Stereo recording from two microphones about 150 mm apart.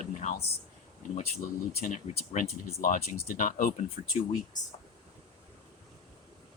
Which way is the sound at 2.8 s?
75° left (ahead or behind).